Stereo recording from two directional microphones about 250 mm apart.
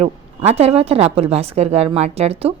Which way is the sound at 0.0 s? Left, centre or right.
Right.